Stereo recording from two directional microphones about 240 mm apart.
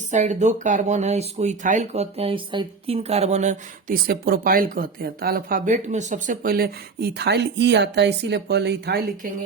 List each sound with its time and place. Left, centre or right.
0.1 s speech: right